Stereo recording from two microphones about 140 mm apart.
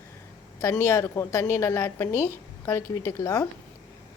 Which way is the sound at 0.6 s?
20° left (ahead or behind).